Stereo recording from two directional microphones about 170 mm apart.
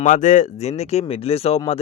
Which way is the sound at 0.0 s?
50° left (ahead or behind).